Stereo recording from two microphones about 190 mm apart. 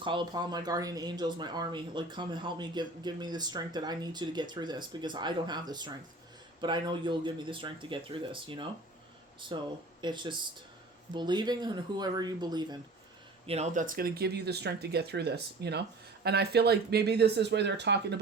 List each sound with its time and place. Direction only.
0.0 s speech: 25° right (ahead or behind)
13.5 s speech: 40° right (ahead or behind); by 18.2 s 65° right (ahead or behind)